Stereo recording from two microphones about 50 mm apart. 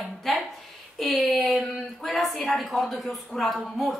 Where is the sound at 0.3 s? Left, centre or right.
Centre.